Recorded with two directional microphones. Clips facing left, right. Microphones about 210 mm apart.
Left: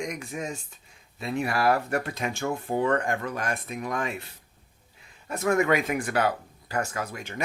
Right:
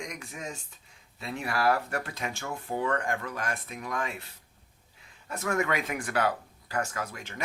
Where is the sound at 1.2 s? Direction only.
15° left (ahead or behind).